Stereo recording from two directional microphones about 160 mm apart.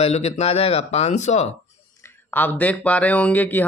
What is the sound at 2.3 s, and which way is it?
Speech, 10° left (ahead or behind).